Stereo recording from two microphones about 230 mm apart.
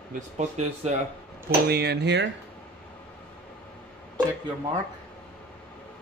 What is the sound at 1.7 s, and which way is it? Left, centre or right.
Speech, right.